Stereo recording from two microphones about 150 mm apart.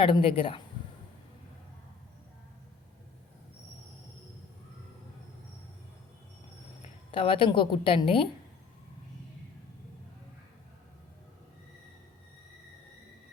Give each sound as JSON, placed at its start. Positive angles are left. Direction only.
{"t": 0.0, "sound": "speech", "side_deg": 35}
{"t": 6.8, "sound": "speech", "side_deg": 35}